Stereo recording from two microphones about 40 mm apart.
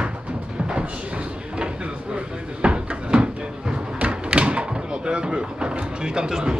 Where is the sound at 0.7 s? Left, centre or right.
Right.